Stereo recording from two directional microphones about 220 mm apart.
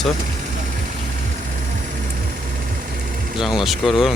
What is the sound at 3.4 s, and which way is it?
Speech, centre (ahead or behind).